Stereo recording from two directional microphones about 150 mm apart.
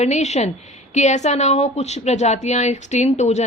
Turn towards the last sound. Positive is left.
turn(degrees=50)  # may be behind; listen again after turning